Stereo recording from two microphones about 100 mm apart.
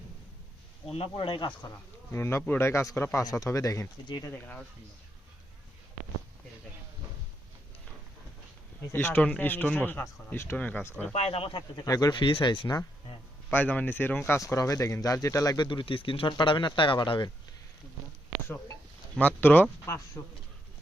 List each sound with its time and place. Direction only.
0.9 s speech: 80° left
1.1 s speech: 50° left (ahead or behind)
2.1 s speech: 25° left (ahead or behind)
3.2 s speech: 35° left (ahead or behind)
4.2 s speech: 20° left (ahead or behind)
8.9 s a man's voice: 25° left (ahead or behind)
11.1 s speech: 85° left; by 11.9 s 55° left (ahead or behind)
11.9 s speech: 40° left (ahead or behind)
12.2 s speech: 55° left (ahead or behind)
13.5 s speech: 15° left (ahead or behind); by 15.5 s 35° left (ahead or behind)
15.5 s speech: 50° left (ahead or behind)
19.4 s speech: 20° left (ahead or behind)